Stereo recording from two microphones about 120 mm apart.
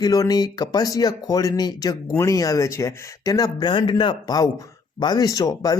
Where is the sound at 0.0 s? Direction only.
30° left (ahead or behind).